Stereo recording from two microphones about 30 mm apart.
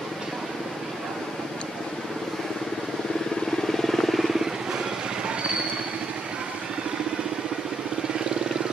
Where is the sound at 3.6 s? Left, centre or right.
Centre.